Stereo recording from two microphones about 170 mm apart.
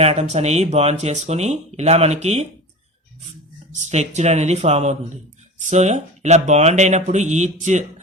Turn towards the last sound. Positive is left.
turn(degrees=-45)  # may be behind; listen again after turning